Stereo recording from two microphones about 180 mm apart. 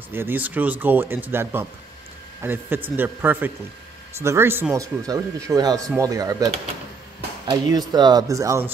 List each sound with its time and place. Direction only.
0.1 s speech: 10° right (ahead or behind)